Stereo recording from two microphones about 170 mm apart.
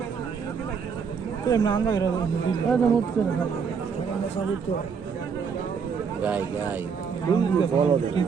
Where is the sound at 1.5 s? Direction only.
25° left (ahead or behind).